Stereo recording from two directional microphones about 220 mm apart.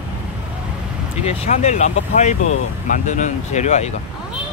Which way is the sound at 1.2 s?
30° left (ahead or behind).